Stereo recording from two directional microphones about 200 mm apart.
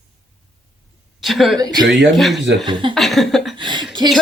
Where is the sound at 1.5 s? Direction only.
20° right (ahead or behind).